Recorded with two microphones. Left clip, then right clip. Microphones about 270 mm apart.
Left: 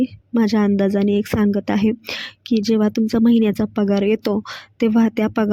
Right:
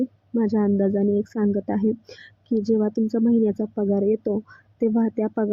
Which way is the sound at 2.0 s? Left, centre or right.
Left.